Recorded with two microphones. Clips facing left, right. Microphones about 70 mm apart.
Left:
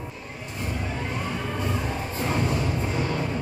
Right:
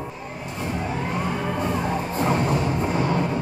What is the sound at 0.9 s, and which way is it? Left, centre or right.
Vehicle, right.